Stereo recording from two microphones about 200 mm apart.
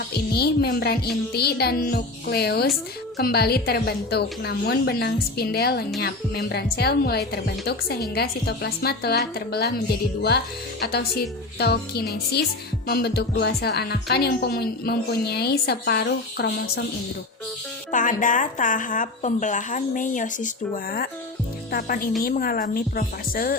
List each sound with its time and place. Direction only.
0.1 s a woman's voice: 55° left (ahead or behind)
17.9 s speech: 40° left (ahead or behind)
21.7 s a woman's voice: 45° left (ahead or behind)